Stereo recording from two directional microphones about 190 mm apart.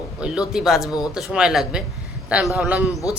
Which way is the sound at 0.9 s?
20° left (ahead or behind).